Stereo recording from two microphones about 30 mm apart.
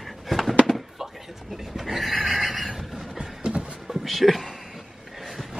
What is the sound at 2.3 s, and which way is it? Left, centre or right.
Neigh, centre.